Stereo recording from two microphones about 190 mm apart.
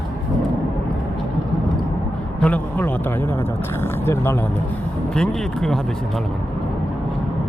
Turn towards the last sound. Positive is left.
turn(degrees=0)  # may be behind; listen again after turning